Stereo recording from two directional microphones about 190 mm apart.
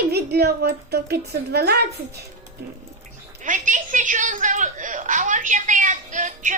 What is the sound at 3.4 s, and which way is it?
A woman's voice, 40° right (ahead or behind).